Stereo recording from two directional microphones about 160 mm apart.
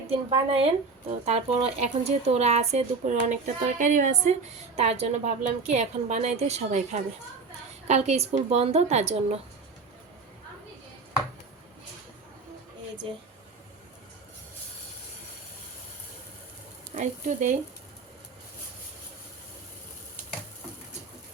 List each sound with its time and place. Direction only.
0.1 s a woman's voice: 35° right (ahead or behind)
16.9 s speech: 50° right (ahead or behind)